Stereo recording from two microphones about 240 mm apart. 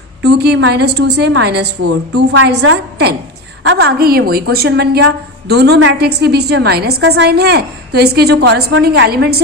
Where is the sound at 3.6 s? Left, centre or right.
Right.